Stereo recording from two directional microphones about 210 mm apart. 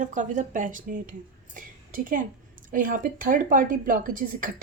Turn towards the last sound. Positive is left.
turn(degrees=-40)  # may be behind; listen again after turning